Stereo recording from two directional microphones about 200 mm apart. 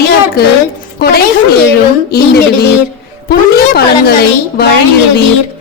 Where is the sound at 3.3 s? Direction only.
50° left (ahead or behind).